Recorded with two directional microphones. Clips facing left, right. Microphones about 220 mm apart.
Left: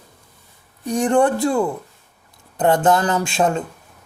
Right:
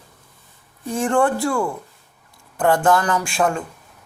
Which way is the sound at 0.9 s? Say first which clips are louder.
Left 2 dB; 15° left (ahead or behind).